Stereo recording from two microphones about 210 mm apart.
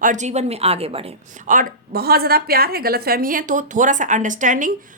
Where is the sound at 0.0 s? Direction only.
35° right (ahead or behind).